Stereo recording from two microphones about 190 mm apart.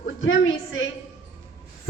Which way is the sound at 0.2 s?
90° left.